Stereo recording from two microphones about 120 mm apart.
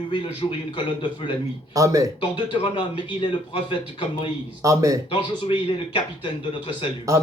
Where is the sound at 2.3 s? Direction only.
45° left (ahead or behind).